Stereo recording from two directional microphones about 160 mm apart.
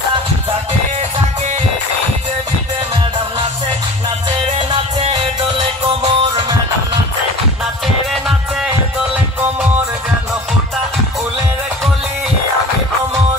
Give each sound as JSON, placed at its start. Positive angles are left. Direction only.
{"t": 5.6, "sound": "music", "side_deg": -30}
{"t": 7.8, "sound": "music", "side_deg": 0}